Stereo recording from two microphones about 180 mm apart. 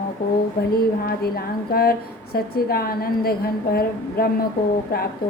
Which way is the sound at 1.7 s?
55° left (ahead or behind).